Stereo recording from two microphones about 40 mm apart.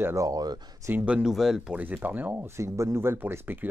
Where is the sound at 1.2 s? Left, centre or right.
Centre.